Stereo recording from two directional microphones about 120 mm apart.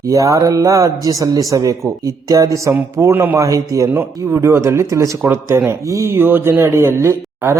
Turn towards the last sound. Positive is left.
turn(degrees=-20)  # may be behind; listen again after turning